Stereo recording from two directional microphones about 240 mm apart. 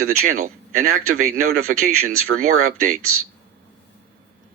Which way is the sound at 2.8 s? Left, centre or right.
Right.